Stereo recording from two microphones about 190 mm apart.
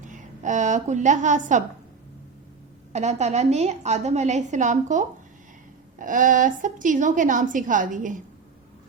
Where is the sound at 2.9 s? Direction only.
35° right (ahead or behind).